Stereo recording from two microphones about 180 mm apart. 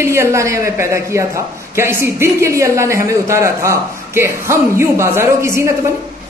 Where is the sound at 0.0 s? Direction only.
15° right (ahead or behind).